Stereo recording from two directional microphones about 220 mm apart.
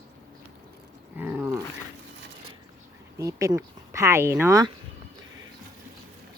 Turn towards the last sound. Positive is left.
turn(degrees=-15)  # may be behind; listen again after turning